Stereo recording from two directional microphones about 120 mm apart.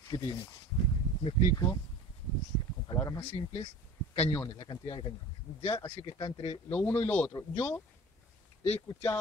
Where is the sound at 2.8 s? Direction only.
35° left (ahead or behind).